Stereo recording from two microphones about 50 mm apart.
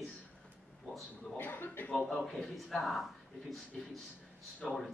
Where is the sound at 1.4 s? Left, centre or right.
Left.